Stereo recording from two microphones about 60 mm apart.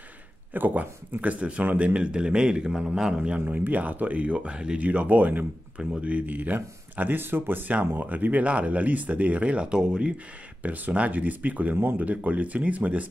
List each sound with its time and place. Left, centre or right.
0.5 s speech: right; by 3.2 s centre
3.3 s speech: right
10.6 s speech: right